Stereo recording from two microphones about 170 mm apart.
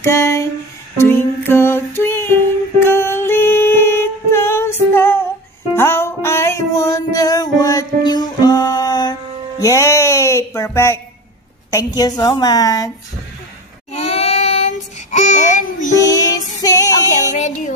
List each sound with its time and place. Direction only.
0.0 s a sound: 15° left (ahead or behind)
0.9 s music: 15° left (ahead or behind)
4.9 s female singing: 15° left (ahead or behind)
5.8 s music: 15° left (ahead or behind)
11.7 s a woman's voice: 20° left (ahead or behind)
13.9 s child singing: 35° left (ahead or behind)
15.9 s music: 20° left (ahead or behind)